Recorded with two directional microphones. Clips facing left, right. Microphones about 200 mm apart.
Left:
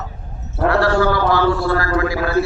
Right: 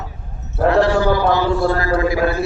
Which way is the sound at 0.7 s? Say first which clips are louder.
Right 1 dB; 20° right (ahead or behind).